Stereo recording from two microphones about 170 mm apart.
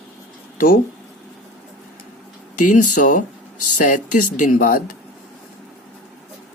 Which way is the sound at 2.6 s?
50° left (ahead or behind).